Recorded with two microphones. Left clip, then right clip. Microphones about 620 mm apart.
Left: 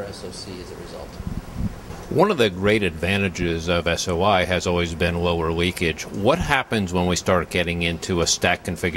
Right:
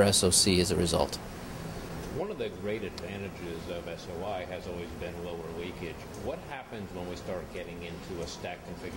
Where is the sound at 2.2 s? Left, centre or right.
Left.